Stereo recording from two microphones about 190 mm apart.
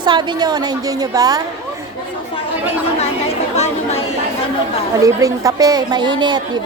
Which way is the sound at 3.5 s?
35° left (ahead or behind).